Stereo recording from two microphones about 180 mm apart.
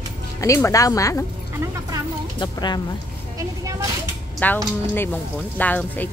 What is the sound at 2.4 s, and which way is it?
Speech, 25° left (ahead or behind).